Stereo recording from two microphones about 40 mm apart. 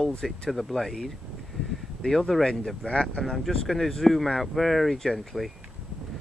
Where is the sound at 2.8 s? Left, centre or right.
Left.